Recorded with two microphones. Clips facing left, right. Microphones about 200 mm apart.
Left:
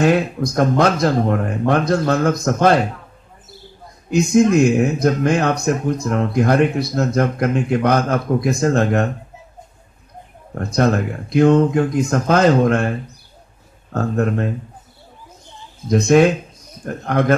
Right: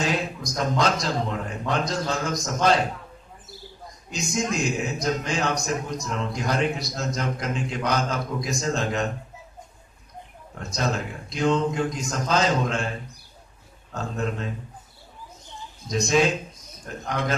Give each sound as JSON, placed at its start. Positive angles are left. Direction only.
{"t": 0.0, "sound": "speech", "side_deg": 60}
{"t": 4.1, "sound": "speech", "side_deg": 60}
{"t": 10.5, "sound": "speech", "side_deg": 60}
{"t": 13.9, "sound": "speech", "side_deg": 55}
{"t": 15.9, "sound": "speech", "side_deg": 60}